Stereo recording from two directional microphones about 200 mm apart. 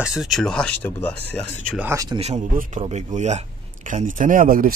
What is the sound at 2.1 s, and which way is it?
A man's voice, 35° right (ahead or behind).